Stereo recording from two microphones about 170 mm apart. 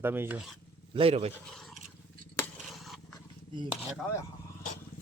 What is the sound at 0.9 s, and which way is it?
Speech, 35° right (ahead or behind).